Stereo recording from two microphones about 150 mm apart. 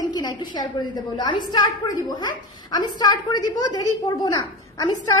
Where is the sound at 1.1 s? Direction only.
30° left (ahead or behind).